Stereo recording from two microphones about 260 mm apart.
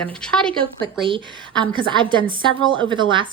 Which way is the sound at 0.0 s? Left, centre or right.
Centre.